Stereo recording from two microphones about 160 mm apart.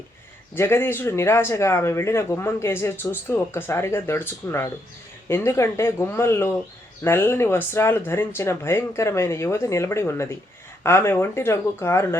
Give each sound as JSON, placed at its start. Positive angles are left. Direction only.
{"t": 0.5, "sound": "speech", "side_deg": 15}